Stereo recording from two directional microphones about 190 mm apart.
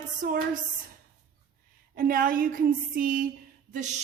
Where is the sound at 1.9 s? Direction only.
50° right (ahead or behind).